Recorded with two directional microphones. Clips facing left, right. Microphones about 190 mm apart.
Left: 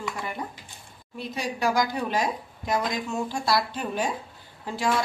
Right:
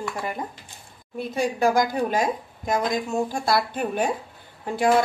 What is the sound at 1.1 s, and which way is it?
Speech, 50° right (ahead or behind).